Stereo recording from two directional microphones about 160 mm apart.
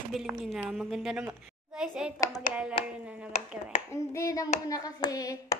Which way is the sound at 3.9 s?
20° left (ahead or behind).